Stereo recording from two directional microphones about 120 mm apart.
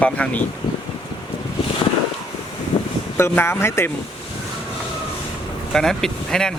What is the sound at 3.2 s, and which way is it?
Speech, 20° left (ahead or behind).